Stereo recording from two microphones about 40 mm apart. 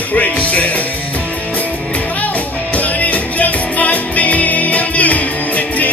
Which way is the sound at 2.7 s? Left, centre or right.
Left.